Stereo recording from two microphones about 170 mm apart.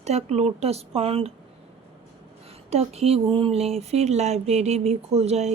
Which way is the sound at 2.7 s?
40° right (ahead or behind).